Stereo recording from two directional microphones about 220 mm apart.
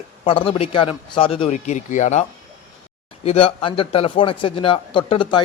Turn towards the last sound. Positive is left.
turn(degrees=20)  # may be behind; listen again after turning